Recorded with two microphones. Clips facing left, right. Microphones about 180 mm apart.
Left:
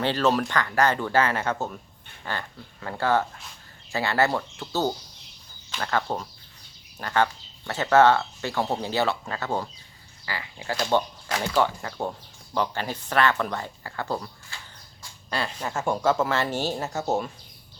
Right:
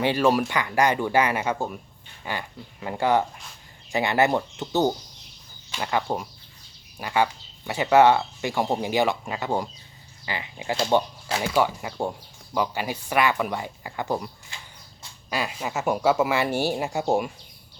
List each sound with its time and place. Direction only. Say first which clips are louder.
0.0 s speech: right 2 dB; 10° right (ahead or behind)
11.5 s speech: right 1 dB; 10° right (ahead or behind)